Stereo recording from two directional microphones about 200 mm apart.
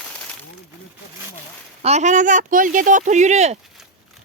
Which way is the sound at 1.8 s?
35° right (ahead or behind).